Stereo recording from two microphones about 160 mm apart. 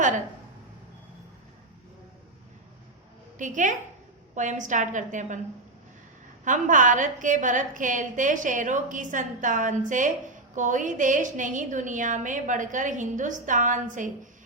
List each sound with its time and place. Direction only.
3.3 s a woman's voice: 50° right (ahead or behind)
6.4 s a woman's voice: 55° right (ahead or behind)